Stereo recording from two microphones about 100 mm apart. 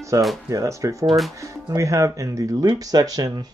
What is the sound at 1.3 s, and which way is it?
Speech, 35° right (ahead or behind).